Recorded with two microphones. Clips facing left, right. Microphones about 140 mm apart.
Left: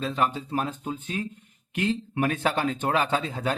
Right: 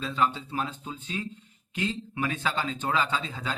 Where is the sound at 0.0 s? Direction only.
45° left (ahead or behind).